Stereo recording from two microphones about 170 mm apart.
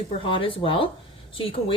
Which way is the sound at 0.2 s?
30° left (ahead or behind).